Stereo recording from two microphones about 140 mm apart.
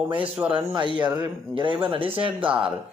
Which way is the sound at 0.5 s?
35° right (ahead or behind).